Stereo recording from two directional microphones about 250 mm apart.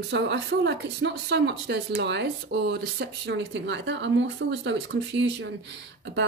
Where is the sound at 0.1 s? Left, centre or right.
Right.